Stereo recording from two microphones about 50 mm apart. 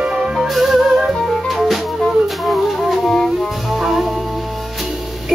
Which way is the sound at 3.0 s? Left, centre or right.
Centre.